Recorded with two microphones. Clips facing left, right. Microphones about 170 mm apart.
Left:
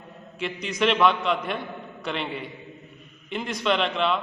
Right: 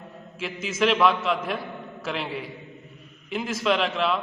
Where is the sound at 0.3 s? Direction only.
Centre (ahead or behind).